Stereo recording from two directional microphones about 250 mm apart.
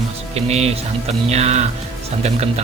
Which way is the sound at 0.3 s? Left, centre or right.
Right.